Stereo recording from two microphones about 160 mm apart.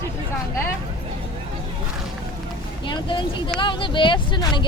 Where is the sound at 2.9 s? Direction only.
30° left (ahead or behind).